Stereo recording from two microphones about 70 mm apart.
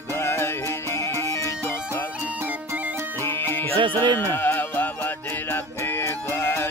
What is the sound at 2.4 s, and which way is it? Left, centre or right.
Music, right.